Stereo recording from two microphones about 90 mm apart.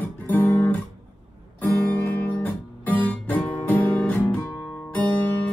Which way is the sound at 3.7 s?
20° left (ahead or behind).